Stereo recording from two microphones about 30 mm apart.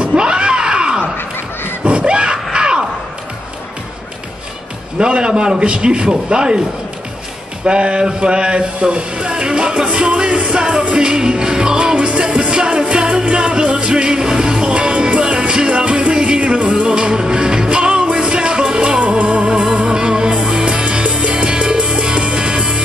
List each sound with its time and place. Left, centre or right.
0.0 s a sound: right
2.5 s a sound: right
4.9 s a man's voice: right
7.6 s speech: right
10.5 s music: right
12.7 s music: right